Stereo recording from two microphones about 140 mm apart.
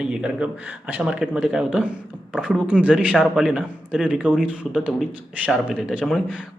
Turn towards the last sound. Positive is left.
turn(degrees=-5)  # may be behind; listen again after turning